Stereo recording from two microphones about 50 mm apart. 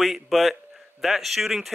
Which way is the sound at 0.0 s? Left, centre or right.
Centre.